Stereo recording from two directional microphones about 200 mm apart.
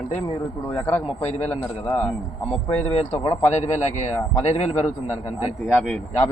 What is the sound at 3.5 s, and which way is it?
A man's voice, 35° left (ahead or behind).